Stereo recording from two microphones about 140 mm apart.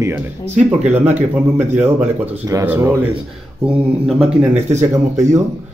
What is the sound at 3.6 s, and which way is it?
Speech, centre (ahead or behind).